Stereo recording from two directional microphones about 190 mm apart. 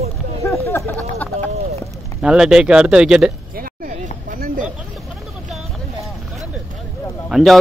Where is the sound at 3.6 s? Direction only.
50° right (ahead or behind).